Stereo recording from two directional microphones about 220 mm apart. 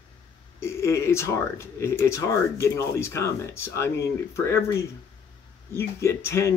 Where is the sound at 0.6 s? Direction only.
10° left (ahead or behind).